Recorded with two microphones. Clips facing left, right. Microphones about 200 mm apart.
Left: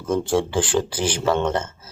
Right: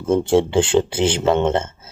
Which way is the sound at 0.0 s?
25° right (ahead or behind).